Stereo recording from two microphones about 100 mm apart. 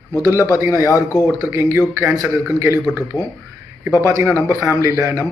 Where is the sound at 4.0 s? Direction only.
25° right (ahead or behind).